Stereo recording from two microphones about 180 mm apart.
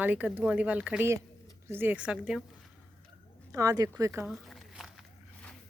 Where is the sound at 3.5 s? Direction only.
20° right (ahead or behind).